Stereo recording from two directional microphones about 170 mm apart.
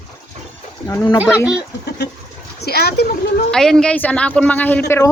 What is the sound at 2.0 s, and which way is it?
Speech, 75° left (ahead or behind).